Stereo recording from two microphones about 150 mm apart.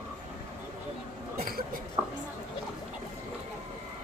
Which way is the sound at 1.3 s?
80° right.